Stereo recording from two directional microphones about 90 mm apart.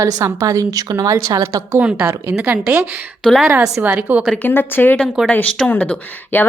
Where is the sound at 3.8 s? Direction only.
15° right (ahead or behind).